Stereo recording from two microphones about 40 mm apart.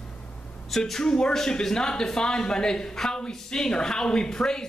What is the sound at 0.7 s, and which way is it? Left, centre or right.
Speech, centre.